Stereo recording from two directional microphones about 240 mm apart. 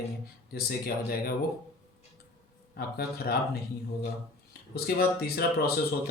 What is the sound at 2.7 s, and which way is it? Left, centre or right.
Speech, left.